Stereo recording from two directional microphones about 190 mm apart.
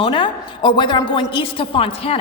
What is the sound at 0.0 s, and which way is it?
A woman's voice, 25° left (ahead or behind).